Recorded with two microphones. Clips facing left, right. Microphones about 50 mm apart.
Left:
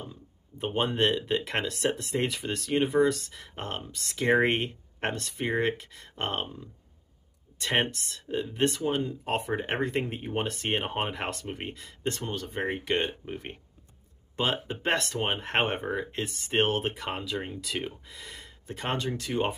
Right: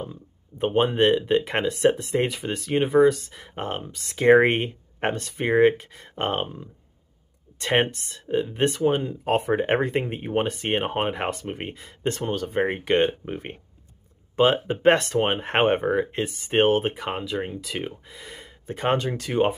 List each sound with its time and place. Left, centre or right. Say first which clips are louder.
0.1 s a sound: right 5 dB; right
0.7 s speech: right 6 dB; centre
9.2 s speech: right 7 dB; right
9.8 s speech: right 5 dB; centre
18.8 s speech: right 7 dB; right